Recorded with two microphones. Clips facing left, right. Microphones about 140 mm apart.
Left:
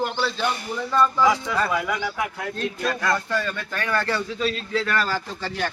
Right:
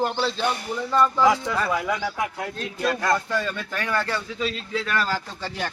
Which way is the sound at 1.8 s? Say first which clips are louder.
Right 1 dB; 30° right (ahead or behind).